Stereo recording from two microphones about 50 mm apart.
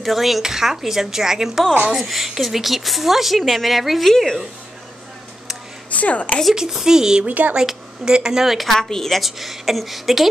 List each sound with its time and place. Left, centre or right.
0.0 s a woman's voice: centre
5.9 s a woman's voice: left
6.5 s speech: centre
7.2 s speech: right
7.5 s speech: centre
8.5 s a woman's voice: centre